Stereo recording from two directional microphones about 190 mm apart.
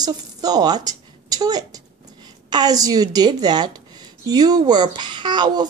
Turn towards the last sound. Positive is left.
turn(degrees=-25)  # may be behind; listen again after turning